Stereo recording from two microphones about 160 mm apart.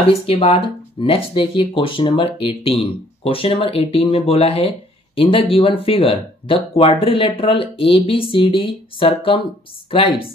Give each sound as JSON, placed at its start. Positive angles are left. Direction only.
{"t": 0.0, "sound": "speech", "side_deg": 35}